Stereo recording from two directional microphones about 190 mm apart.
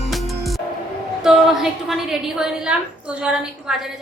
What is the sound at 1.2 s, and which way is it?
A woman's voice, centre (ahead or behind).